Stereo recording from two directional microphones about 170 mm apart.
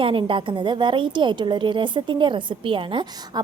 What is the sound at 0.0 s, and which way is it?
A woman's voice, 30° right (ahead or behind).